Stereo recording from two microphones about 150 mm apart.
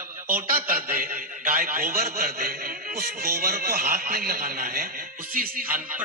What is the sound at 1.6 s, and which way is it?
A man's voice, 80° right.